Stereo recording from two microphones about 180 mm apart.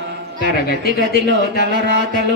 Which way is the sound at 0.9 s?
55° left (ahead or behind).